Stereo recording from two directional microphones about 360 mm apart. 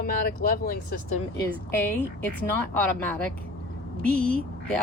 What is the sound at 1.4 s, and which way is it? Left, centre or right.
A woman's voice, centre.